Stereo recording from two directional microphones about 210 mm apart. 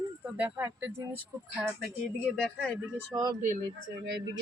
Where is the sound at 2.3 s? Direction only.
5° left (ahead or behind).